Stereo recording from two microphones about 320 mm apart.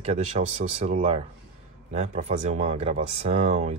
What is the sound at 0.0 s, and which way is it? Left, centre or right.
Speech, centre.